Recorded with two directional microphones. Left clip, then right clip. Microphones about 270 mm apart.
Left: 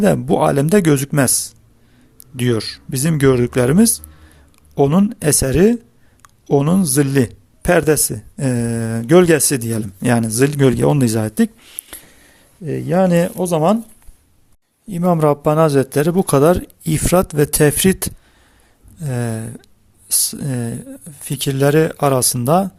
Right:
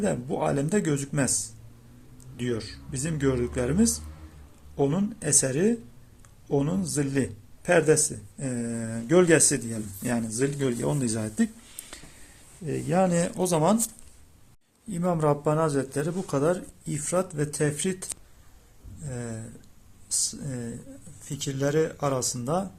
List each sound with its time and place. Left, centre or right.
0.0 s a man's voice: left
2.3 s a man's voice: left
14.8 s a man's voice: left